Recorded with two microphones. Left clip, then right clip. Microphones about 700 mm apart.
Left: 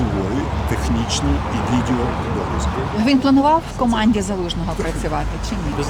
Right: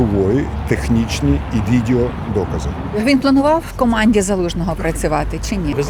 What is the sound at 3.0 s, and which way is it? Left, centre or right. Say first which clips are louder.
Speech: right 2 dB; centre.